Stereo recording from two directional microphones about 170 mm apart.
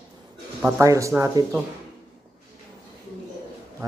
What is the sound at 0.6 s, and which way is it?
Speech, 20° right (ahead or behind).